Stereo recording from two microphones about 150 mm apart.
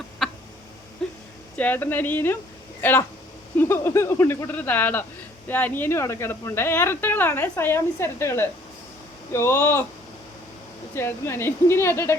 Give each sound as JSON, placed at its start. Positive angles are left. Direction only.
{"t": 0.2, "sound": "a sound", "side_deg": 0}
{"t": 1.5, "sound": "a woman's voice", "side_deg": 10}
{"t": 10.9, "sound": "a woman's voice", "side_deg": 15}